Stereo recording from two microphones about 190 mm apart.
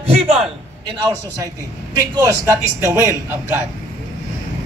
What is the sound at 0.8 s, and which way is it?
A man's voice, 20° right (ahead or behind).